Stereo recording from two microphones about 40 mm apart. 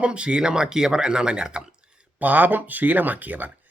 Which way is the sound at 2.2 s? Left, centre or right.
Right.